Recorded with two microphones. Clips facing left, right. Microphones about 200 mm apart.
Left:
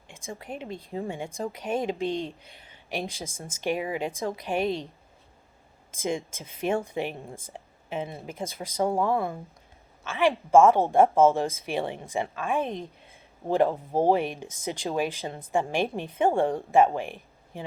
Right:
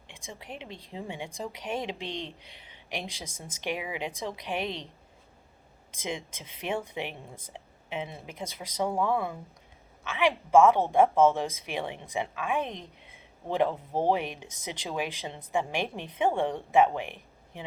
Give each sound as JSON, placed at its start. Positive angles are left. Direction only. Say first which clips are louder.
{"t": 0.3, "sound": "a woman's voice", "louder": "left 6 dB", "side_deg": 45}
{"t": 2.6, "sound": "a sound", "louder": "left 5 dB", "side_deg": 45}
{"t": 3.2, "sound": "speech", "louder": "left 4 dB", "side_deg": -15}
{"t": 3.6, "sound": "a woman's voice", "louder": "left 5 dB", "side_deg": 45}
{"t": 6.0, "sound": "a woman's voice", "louder": "left 6 dB", "side_deg": 45}